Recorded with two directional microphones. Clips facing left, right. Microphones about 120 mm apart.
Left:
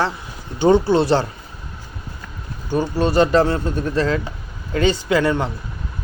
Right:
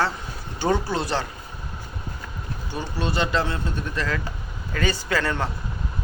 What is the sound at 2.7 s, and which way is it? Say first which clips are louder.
Speech: left 10 dB; 45° left (ahead or behind).